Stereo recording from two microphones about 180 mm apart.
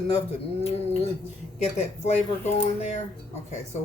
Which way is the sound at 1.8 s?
40° left (ahead or behind).